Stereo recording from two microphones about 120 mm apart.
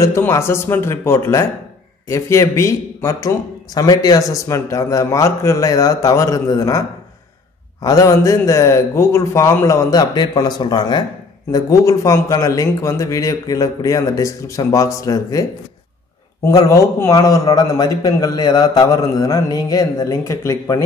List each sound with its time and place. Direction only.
0.0 s a man's voice: 25° left (ahead or behind)
7.8 s a man's voice: 30° left (ahead or behind)
16.4 s a man's voice: 30° left (ahead or behind)